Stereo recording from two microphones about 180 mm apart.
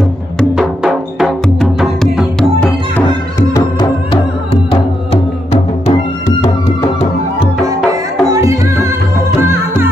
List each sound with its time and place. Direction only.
0.4 s music: centre (ahead or behind)
4.6 s music: 35° left (ahead or behind)
7.6 s music: 20° right (ahead or behind)